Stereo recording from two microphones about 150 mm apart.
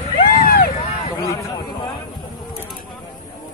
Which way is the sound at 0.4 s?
80° left.